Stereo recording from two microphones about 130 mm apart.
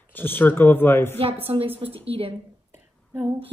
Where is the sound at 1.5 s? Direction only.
45° right (ahead or behind).